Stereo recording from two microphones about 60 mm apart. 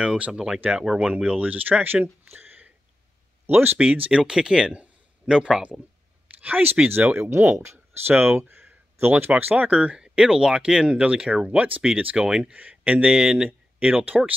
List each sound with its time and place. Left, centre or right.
0.0 s speech: centre
0.6 s speech: right
2.3 s a sound: right
3.4 s speech: right
4.2 s speech: centre
6.4 s speech: right
7.2 s speech: right
9.3 s speech: right